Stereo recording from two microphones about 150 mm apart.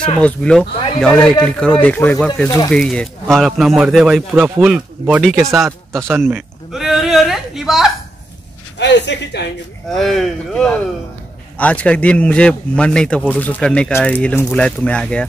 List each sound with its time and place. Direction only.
0.2 s speech: 5° left (ahead or behind)
2.4 s speech: 25° left (ahead or behind)
2.7 s speech: 5° left (ahead or behind)
5.7 s speech: 15° right (ahead or behind)
6.7 s a sound: centre (ahead or behind)
9.9 s speech: centre (ahead or behind)